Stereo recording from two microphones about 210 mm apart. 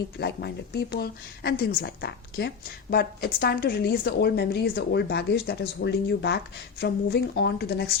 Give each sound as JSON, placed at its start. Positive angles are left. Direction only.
{"t": 0.2, "sound": "a woman's voice", "side_deg": 50}